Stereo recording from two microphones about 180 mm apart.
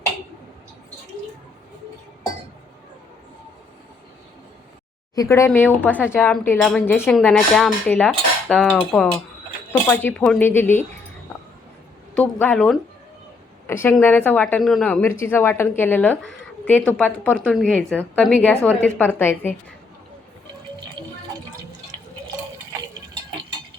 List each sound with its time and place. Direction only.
5.1 s a woman's voice: 15° left (ahead or behind)
12.1 s a woman's voice: 10° left (ahead or behind)
21.0 s a sound: 25° right (ahead or behind)